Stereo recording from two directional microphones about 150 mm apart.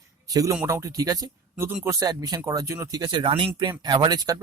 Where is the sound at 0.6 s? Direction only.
20° right (ahead or behind).